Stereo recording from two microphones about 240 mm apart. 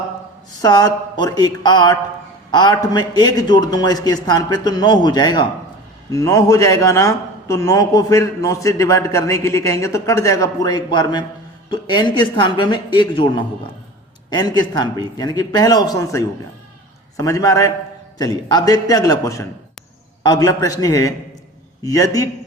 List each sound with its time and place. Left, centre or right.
0.6 s a man's voice: centre